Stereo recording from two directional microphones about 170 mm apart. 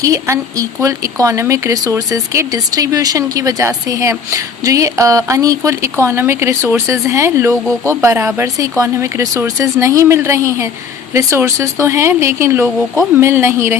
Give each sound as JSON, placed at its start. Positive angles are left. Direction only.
{"t": 0.0, "sound": "speech", "side_deg": -20}